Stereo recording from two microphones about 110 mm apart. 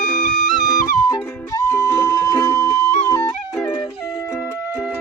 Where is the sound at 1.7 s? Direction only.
20° left (ahead or behind).